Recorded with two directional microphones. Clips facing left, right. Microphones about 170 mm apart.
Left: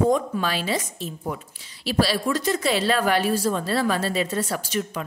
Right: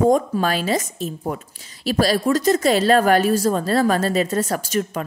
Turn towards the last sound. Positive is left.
turn(degrees=-45)  # may be behind; listen again after turning